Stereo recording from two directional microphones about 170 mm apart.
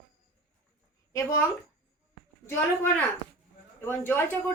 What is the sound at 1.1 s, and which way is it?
A man's voice, 15° left (ahead or behind).